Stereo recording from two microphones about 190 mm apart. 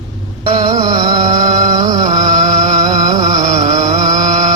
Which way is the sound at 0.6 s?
20° right (ahead or behind).